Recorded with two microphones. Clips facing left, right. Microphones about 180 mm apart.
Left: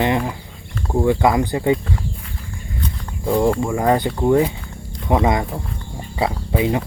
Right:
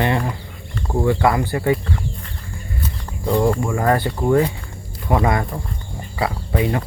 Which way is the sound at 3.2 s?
5° left (ahead or behind).